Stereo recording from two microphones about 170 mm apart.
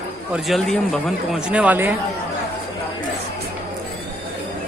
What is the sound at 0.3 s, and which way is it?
Speech, centre (ahead or behind).